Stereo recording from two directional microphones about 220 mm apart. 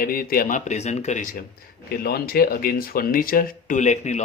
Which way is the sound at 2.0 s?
45° left (ahead or behind).